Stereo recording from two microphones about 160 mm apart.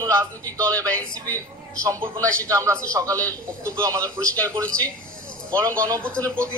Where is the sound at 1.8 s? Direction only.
20° right (ahead or behind).